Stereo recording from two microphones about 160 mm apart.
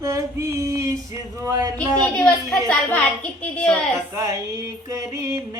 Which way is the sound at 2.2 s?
5° left (ahead or behind).